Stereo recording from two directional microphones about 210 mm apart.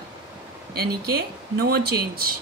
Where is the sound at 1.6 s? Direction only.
50° right (ahead or behind).